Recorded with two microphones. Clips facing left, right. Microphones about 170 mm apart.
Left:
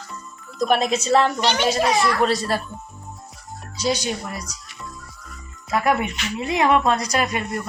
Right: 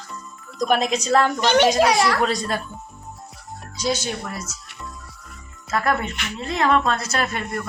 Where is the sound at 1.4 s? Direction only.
55° right (ahead or behind).